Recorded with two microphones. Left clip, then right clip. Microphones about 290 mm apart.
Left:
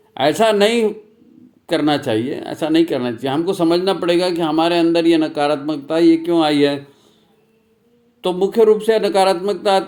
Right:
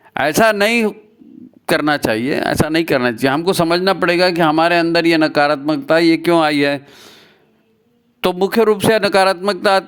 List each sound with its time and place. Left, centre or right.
0.1 s speech: right
8.2 s speech: right